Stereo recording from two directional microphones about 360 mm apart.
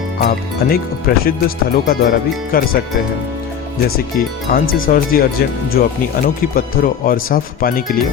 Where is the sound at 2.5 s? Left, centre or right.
Left.